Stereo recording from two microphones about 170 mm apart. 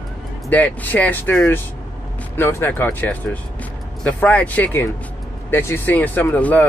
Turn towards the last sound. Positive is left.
turn(degrees=10)  # may be behind; listen again after turning